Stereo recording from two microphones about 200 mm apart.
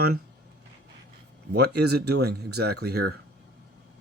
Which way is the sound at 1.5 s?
55° right (ahead or behind).